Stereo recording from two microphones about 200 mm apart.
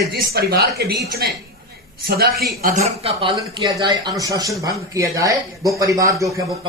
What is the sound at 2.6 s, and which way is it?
Speech, 35° right (ahead or behind).